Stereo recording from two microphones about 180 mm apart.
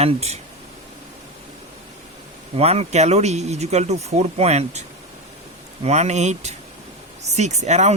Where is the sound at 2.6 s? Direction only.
35° right (ahead or behind).